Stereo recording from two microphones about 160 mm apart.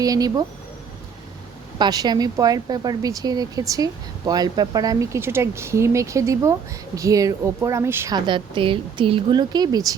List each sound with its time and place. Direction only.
0.0 s speech: 25° right (ahead or behind)
1.8 s speech: 25° right (ahead or behind)
8.3 s speech: 30° right (ahead or behind)